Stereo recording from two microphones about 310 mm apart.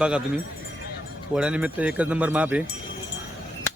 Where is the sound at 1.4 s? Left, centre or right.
Centre.